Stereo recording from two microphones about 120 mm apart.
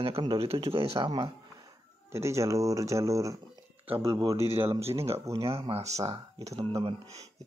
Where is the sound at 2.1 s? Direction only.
25° right (ahead or behind).